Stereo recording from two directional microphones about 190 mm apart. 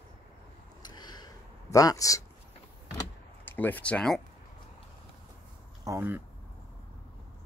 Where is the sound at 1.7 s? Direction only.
15° left (ahead or behind).